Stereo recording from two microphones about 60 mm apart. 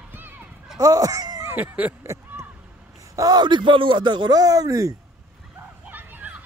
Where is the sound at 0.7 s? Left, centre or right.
Right.